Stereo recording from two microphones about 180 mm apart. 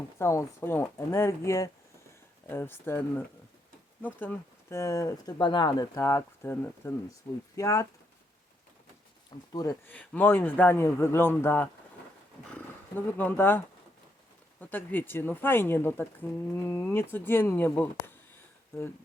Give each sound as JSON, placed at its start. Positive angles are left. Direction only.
{"t": 0.2, "sound": "speech", "side_deg": 15}
{"t": 9.5, "sound": "speech", "side_deg": 20}
{"t": 9.9, "sound": "speech", "side_deg": 10}
{"t": 13.1, "sound": "speech", "side_deg": 10}
{"t": 14.6, "sound": "speech", "side_deg": 10}